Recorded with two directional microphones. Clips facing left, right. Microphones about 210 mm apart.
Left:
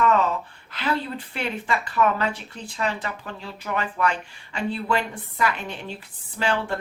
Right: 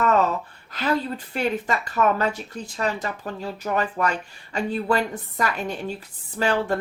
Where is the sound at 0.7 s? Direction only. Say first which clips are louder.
Right 2 dB; 40° right (ahead or behind).